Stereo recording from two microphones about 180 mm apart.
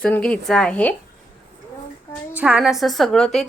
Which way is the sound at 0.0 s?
5° left (ahead or behind).